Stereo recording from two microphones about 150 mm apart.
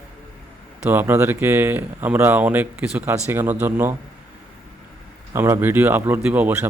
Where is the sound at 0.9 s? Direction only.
15° right (ahead or behind).